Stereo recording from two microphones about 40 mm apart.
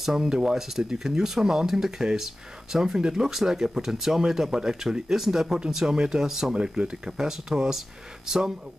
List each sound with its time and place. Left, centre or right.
0.0 s speech: centre
6.5 s speech: right